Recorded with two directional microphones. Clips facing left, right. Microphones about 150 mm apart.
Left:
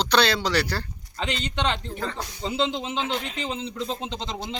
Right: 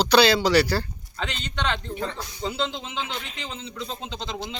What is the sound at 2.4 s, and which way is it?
A man's voice, 30° left (ahead or behind).